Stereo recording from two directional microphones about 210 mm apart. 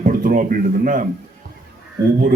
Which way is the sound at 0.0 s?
40° right (ahead or behind).